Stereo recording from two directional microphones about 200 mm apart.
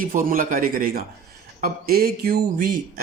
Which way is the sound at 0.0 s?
45° right (ahead or behind).